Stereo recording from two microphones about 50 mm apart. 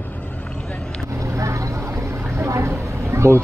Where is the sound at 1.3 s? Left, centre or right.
Right.